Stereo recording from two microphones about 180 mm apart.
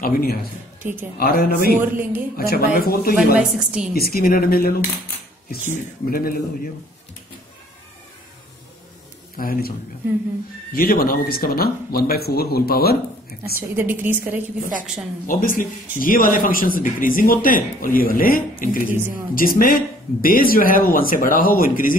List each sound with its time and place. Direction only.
0.0 s speech: 55° left (ahead or behind)
0.8 s a woman's voice: 10° right (ahead or behind)
1.2 s speech: 55° left (ahead or behind)
1.7 s a woman's voice: 10° right (ahead or behind)
2.3 s speech: 55° left (ahead or behind)
3.3 s a woman's voice: 5° right (ahead or behind)
3.9 s speech: 55° left (ahead or behind)
6.0 s speech: 55° left (ahead or behind)
9.4 s speech: 55° left (ahead or behind)
13.6 s a woman's voice: 10° right (ahead or behind)
15.2 s speech: 50° left (ahead or behind)